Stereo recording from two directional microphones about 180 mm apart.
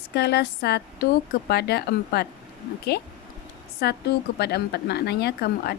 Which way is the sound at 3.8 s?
65° left (ahead or behind).